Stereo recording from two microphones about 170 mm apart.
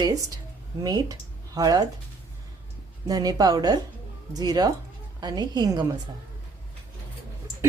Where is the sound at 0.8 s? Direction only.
20° right (ahead or behind).